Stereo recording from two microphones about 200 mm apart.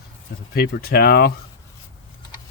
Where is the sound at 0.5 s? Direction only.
50° left (ahead or behind).